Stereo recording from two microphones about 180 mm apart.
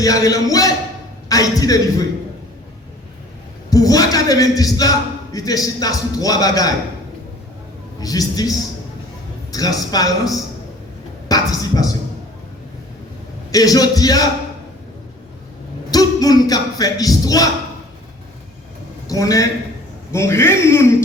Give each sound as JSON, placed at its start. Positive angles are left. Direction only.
{"t": 0.0, "sound": "a man's voice", "side_deg": 20}
{"t": 3.7, "sound": "a man's voice", "side_deg": 20}
{"t": 8.0, "sound": "a man's voice", "side_deg": 20}
{"t": 13.5, "sound": "a man's voice", "side_deg": 20}
{"t": 15.9, "sound": "speech", "side_deg": 20}
{"t": 19.0, "sound": "a man's voice", "side_deg": 20}